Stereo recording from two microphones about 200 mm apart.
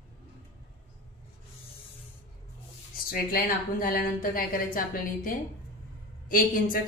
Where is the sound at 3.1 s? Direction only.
45° left (ahead or behind).